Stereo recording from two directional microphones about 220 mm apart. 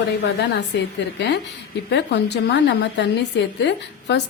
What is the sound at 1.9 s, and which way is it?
A woman's voice, 50° left (ahead or behind).